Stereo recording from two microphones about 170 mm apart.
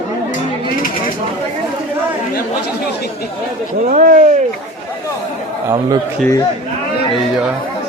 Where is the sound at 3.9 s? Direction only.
55° right (ahead or behind).